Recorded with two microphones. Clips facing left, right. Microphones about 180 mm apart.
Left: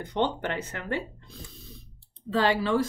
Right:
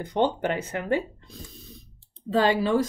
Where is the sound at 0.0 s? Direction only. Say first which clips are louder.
Right 4 dB; 10° right (ahead or behind).